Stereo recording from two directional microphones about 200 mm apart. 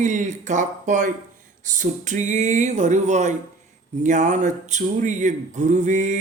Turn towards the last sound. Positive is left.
turn(degrees=-35)  # may be behind; listen again after turning